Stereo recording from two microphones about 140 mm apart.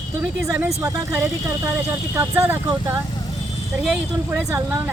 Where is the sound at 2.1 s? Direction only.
15° right (ahead or behind).